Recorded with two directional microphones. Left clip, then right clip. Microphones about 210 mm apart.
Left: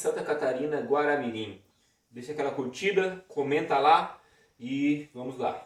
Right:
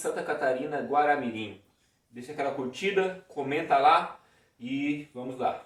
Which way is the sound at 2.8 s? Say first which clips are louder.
Left 1 dB; 15° right (ahead or behind).